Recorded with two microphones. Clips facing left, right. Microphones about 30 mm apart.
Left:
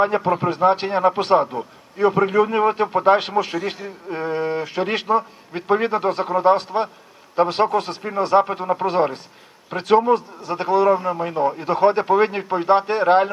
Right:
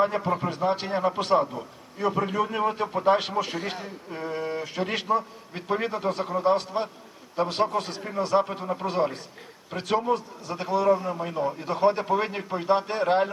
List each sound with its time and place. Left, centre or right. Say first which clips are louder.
0.0 s a man's voice: left 6 dB; left
4.7 s a man's voice: left 5 dB; left
8.6 s a man's voice: left 7 dB; left
11.5 s a man's voice: left 5 dB; left